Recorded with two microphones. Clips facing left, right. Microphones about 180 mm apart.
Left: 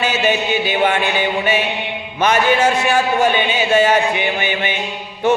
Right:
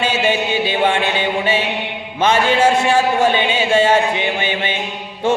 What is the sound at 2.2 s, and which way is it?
A man's voice, 25° right (ahead or behind).